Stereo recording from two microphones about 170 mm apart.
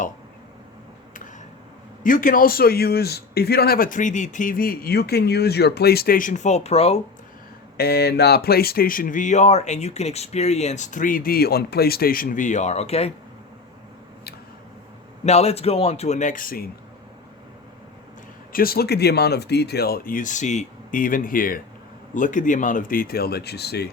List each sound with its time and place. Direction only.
2.0 s a man's voice: 55° left (ahead or behind); by 7.0 s 35° left (ahead or behind)
7.8 s speech: 70° left (ahead or behind); by 13.1 s 35° left (ahead or behind)
15.2 s speech: 40° left (ahead or behind); by 16.6 s 55° left (ahead or behind)
18.5 s a man's voice: 60° left (ahead or behind)